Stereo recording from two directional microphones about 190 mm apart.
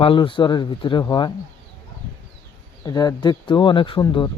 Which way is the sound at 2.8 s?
20° left (ahead or behind).